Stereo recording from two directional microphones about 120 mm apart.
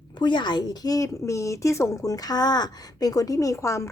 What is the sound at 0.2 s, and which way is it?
A woman's voice, 40° left (ahead or behind).